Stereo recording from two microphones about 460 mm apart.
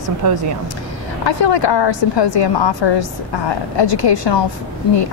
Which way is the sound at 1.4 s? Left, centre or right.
Left.